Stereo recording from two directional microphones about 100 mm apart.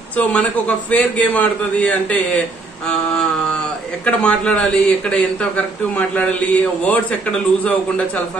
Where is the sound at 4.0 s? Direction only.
10° left (ahead or behind).